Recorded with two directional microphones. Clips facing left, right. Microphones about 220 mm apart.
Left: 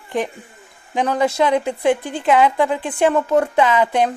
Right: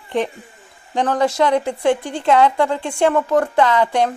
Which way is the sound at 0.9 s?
15° left (ahead or behind).